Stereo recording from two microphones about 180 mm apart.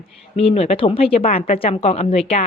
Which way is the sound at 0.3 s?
35° left (ahead or behind).